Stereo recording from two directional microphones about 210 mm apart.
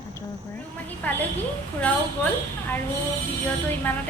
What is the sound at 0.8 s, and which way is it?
Speech, 10° left (ahead or behind).